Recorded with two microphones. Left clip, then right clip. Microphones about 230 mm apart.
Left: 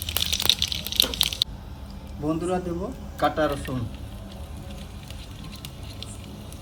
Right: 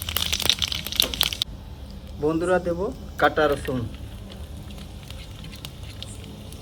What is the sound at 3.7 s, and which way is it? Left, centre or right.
Speech, right.